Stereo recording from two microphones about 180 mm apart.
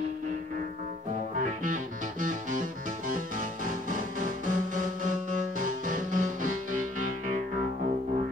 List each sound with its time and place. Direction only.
1.4 s music: 45° right (ahead or behind)
3.6 s music: 45° right (ahead or behind)